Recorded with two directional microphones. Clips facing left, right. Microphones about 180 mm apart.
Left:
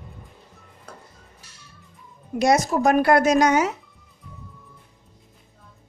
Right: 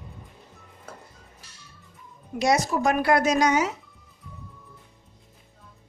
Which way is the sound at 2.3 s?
50° left (ahead or behind).